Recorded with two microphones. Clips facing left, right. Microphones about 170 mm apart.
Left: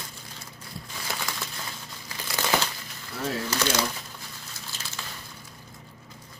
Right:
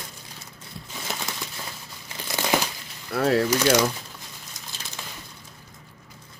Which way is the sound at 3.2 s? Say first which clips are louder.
Right 10 dB; 70° right (ahead or behind).